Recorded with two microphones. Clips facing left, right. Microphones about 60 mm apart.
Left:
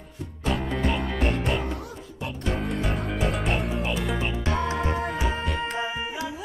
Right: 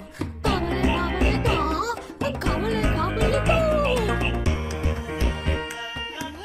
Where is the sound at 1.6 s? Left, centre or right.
Right.